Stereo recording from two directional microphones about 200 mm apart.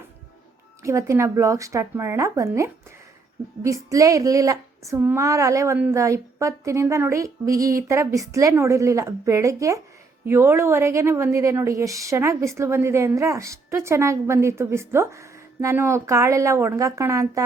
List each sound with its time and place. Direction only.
0.8 s a woman's voice: 15° right (ahead or behind)